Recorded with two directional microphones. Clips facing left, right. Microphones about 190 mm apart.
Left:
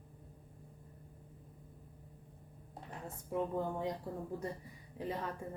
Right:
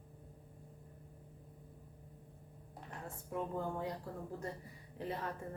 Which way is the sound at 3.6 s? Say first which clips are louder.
Left 3 dB; 20° left (ahead or behind).